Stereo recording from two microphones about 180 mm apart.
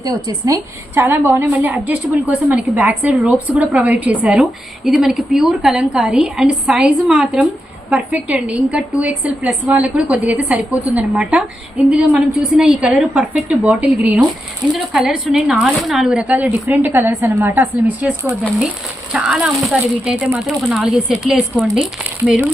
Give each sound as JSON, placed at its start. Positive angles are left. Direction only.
{"t": 0.0, "sound": "speech", "side_deg": -20}
{"t": 19.1, "sound": "speech", "side_deg": -5}